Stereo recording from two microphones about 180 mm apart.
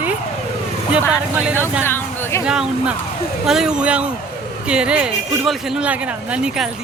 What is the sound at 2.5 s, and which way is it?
A woman's voice, 5° right (ahead or behind).